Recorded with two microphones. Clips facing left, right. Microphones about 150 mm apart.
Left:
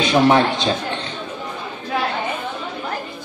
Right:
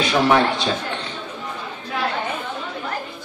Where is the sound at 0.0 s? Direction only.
20° left (ahead or behind).